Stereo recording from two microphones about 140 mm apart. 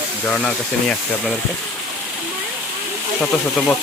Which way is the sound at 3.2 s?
5° left (ahead or behind).